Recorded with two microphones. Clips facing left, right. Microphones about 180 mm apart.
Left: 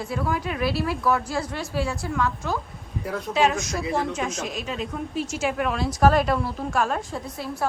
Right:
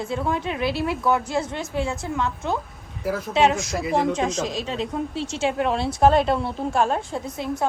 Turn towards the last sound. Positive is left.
turn(degrees=-20)  # may be behind; listen again after turning